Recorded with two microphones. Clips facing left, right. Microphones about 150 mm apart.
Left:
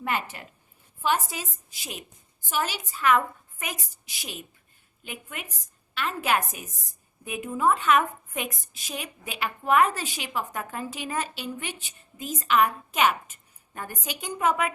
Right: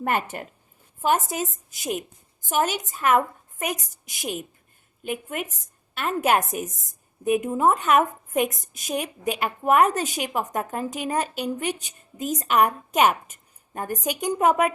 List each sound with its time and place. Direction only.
0.0 s a woman's voice: 50° right (ahead or behind)